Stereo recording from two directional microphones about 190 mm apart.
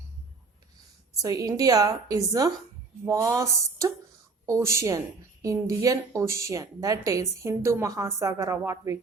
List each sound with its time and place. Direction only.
1.1 s a woman's voice: 15° right (ahead or behind)